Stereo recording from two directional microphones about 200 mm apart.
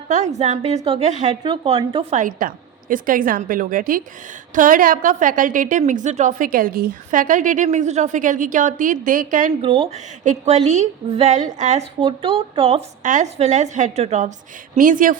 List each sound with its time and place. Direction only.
0.3 s a woman's voice: 35° right (ahead or behind)
2.1 s a woman's voice: 40° right (ahead or behind)
9.6 s a woman's voice: 25° right (ahead or behind); by 15.2 s 40° right (ahead or behind)